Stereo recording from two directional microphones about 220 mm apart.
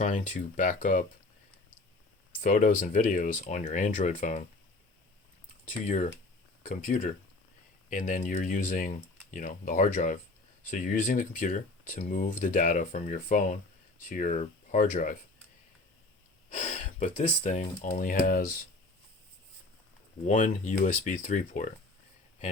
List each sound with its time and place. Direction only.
0.0 s speech: 35° left (ahead or behind)
2.4 s speech: 35° left (ahead or behind)
6.6 s speech: 35° left (ahead or behind)
16.5 s speech: 35° left (ahead or behind)
20.2 s speech: 35° left (ahead or behind)